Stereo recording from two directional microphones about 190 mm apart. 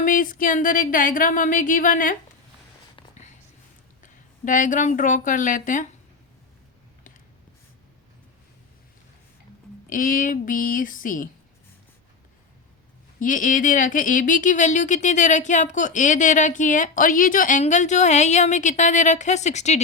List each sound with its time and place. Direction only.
0.0 s speech: 45° left (ahead or behind)
2.9 s whispering: 35° left (ahead or behind)
4.0 s speech: 45° left (ahead or behind)
9.9 s speech: 45° left (ahead or behind)
13.1 s speech: 45° left (ahead or behind)